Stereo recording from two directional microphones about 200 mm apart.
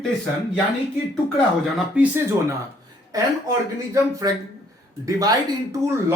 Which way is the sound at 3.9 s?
15° right (ahead or behind).